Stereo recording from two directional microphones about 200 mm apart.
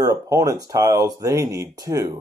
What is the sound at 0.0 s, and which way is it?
Speech, 15° right (ahead or behind).